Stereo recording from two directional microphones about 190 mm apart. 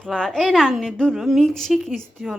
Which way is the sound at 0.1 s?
5° left (ahead or behind).